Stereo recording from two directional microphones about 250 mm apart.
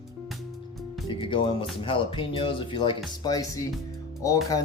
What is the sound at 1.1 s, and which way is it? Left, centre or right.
Speech, centre.